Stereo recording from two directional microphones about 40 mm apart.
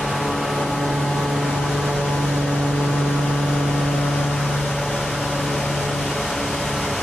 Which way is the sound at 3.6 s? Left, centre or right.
Centre.